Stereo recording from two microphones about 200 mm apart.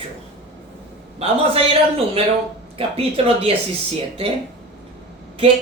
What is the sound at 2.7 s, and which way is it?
Speech, 30° right (ahead or behind).